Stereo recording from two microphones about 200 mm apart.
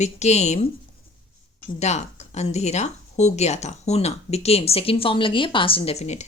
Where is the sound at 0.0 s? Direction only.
35° left (ahead or behind).